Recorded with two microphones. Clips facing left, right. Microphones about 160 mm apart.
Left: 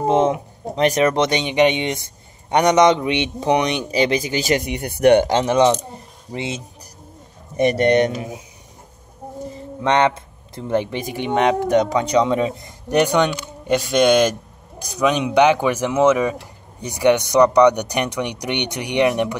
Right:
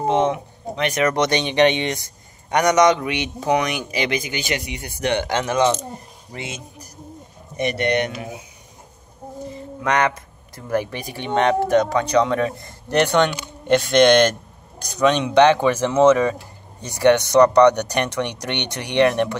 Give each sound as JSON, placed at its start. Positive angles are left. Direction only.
{"t": 0.7, "sound": "speech", "side_deg": 35}
{"t": 5.3, "sound": "speech", "side_deg": 30}
{"t": 7.6, "sound": "speech", "side_deg": 40}
{"t": 9.8, "sound": "speech", "side_deg": 25}